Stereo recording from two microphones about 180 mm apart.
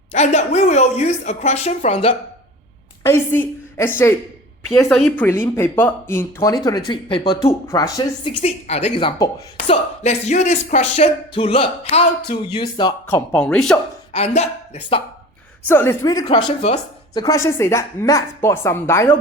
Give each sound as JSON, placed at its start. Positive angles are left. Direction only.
{"t": 0.1, "sound": "music", "side_deg": 40}
{"t": 3.0, "sound": "a woman's voice", "side_deg": 15}
{"t": 4.7, "sound": "a woman's voice", "side_deg": 0}
{"t": 5.2, "sound": "speech", "side_deg": 15}
{"t": 9.6, "sound": "music", "side_deg": 40}
{"t": 13.1, "sound": "speech", "side_deg": 15}
{"t": 13.4, "sound": "a woman's voice", "side_deg": 5}
{"t": 14.1, "sound": "speech", "side_deg": 35}
{"t": 15.7, "sound": "speech", "side_deg": 15}